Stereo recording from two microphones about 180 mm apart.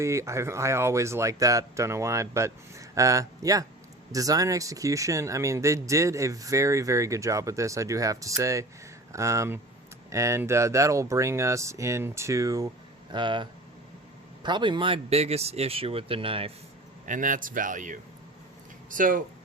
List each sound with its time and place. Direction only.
0.0 s speech: 15° right (ahead or behind)
17.1 s speech: 50° right (ahead or behind)